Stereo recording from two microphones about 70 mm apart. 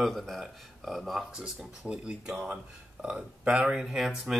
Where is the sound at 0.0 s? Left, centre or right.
Centre.